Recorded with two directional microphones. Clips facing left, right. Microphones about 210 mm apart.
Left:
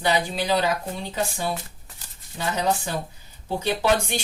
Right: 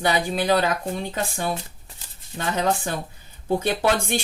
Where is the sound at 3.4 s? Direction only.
55° right (ahead or behind).